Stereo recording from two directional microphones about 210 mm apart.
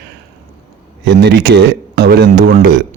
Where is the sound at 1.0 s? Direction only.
55° right (ahead or behind).